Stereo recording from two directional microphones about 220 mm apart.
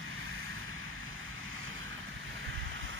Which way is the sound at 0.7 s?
65° right (ahead or behind).